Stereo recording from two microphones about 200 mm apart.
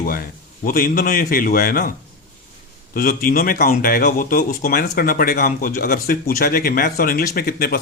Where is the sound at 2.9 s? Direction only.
45° left (ahead or behind).